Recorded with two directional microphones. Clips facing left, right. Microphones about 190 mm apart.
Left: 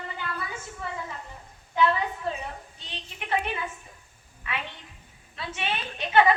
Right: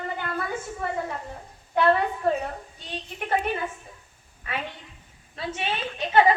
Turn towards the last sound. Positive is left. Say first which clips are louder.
# right 1 dB
turn(degrees=-30)  # may be behind; listen again after turning